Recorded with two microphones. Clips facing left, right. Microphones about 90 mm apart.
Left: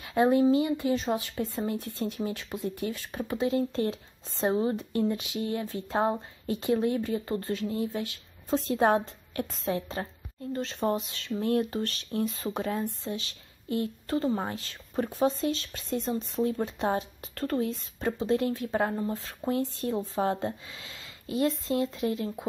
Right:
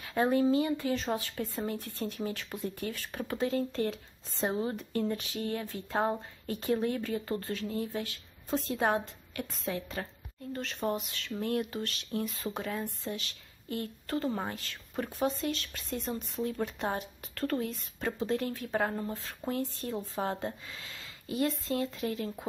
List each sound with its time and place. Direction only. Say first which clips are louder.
0.0 s speech: left 4 dB; 20° left (ahead or behind)